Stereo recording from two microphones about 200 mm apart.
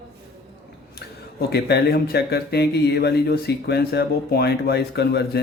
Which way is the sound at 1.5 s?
55° left (ahead or behind).